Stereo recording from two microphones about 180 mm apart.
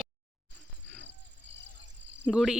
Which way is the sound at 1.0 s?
80° right.